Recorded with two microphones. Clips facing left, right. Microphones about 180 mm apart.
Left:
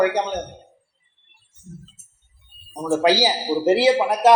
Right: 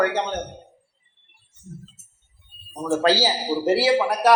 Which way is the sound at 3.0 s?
15° left (ahead or behind).